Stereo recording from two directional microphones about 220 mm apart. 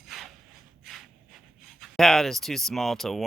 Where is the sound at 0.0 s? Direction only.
Centre (ahead or behind).